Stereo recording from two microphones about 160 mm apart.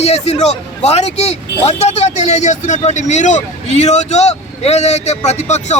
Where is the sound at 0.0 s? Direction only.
40° left (ahead or behind).